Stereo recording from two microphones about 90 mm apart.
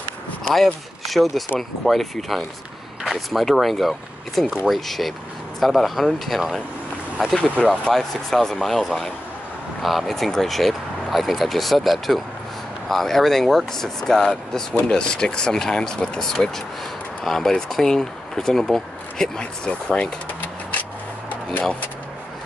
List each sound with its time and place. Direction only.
0.6 s speech: centre (ahead or behind)
7.6 s speech: 10° left (ahead or behind)